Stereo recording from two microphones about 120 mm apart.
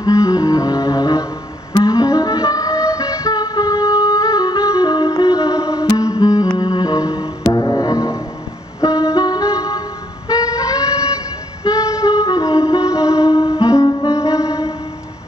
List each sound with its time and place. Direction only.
0.0 s music: 30° left (ahead or behind)